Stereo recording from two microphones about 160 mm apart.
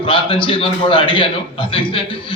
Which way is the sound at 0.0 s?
35° left (ahead or behind).